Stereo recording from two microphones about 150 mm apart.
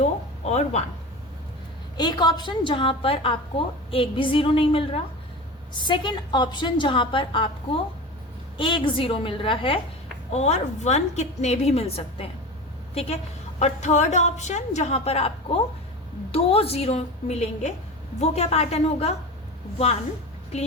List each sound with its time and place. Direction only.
0.0 s a sound: 45° left (ahead or behind)
2.0 s a woman's voice: 30° left (ahead or behind)
10.3 s a woman's voice: 45° left (ahead or behind)